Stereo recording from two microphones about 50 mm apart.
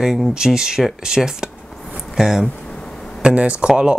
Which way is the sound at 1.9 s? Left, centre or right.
Centre.